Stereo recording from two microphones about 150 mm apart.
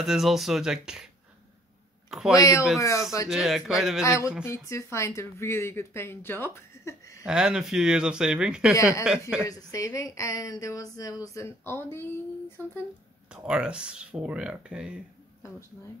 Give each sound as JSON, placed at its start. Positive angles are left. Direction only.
{"t": 0.0, "sound": "speech", "side_deg": 0}
{"t": 2.0, "sound": "speech", "side_deg": 0}
{"t": 2.3, "sound": "a woman's voice", "side_deg": 20}
{"t": 3.3, "sound": "speech", "side_deg": -5}
{"t": 4.0, "sound": "a woman's voice", "side_deg": 20}
{"t": 7.2, "sound": "speech", "side_deg": -5}
{"t": 9.4, "sound": "a woman's voice", "side_deg": 20}
{"t": 12.6, "sound": "speech", "side_deg": -20}
{"t": 13.3, "sound": "speech", "side_deg": -5}